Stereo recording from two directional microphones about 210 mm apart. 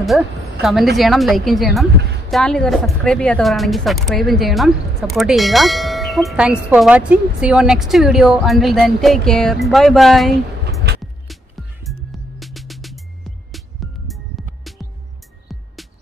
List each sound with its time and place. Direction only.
0.0 s a woman's voice: centre (ahead or behind)
10.9 s music: 50° right (ahead or behind)
12.4 s music: centre (ahead or behind)
14.0 s music: centre (ahead or behind)